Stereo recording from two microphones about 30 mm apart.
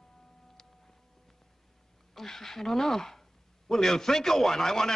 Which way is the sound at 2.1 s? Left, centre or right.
Centre.